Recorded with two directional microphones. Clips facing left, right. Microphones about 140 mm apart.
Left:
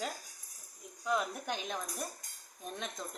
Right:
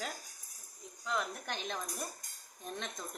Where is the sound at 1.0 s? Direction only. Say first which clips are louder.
Left 3 dB; 15° left (ahead or behind).